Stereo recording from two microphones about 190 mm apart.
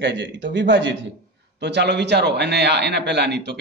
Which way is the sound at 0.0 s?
70° right (ahead or behind).